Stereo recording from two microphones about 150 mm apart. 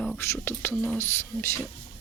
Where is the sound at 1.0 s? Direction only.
15° left (ahead or behind).